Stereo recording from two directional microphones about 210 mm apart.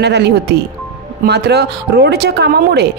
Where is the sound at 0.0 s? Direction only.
55° right (ahead or behind).